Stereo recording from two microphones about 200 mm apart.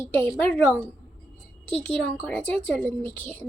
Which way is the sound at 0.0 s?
10° left (ahead or behind).